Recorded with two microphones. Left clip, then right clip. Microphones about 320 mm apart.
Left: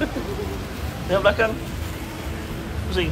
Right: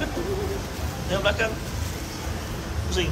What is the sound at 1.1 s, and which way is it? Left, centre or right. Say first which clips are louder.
Speech: left 5 dB; centre.